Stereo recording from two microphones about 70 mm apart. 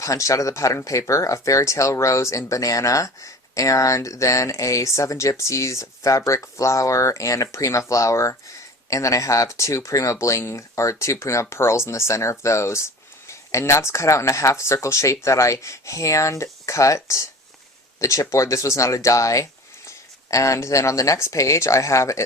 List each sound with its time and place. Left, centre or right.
0.0 s speech: left